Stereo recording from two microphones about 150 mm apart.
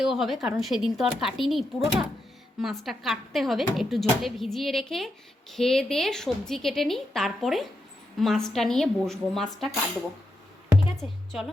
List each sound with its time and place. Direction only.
0.0 s speech: 5° right (ahead or behind)